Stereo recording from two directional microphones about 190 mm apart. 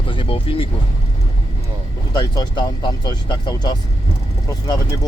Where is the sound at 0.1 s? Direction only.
30° left (ahead or behind).